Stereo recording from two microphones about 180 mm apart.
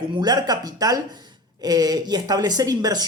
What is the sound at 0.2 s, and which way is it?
Speech, 20° right (ahead or behind).